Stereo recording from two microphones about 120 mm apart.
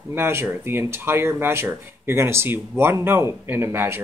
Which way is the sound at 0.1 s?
20° right (ahead or behind).